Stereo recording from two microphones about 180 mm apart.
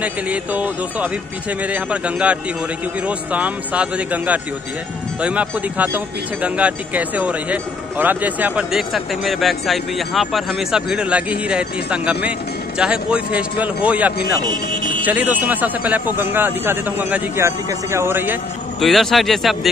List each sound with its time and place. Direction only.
0.0 s speech: 10° right (ahead or behind)
14.4 s speech: 25° right (ahead or behind)
15.0 s speech: 10° right (ahead or behind)
18.8 s speech: centre (ahead or behind)